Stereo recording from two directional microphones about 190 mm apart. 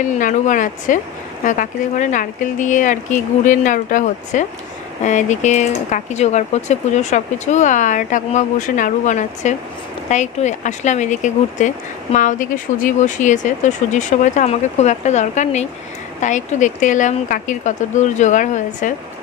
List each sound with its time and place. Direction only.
0.0 s a woman's voice: 40° left (ahead or behind)